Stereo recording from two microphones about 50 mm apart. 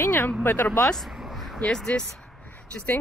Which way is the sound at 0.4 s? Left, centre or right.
Left.